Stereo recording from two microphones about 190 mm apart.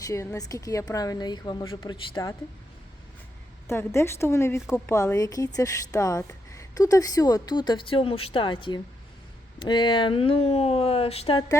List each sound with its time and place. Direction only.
0.0 s speech: 15° left (ahead or behind)
3.7 s speech: 15° left (ahead or behind)